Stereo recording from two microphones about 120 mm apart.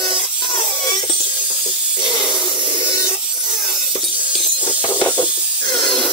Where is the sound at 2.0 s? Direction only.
40° left (ahead or behind).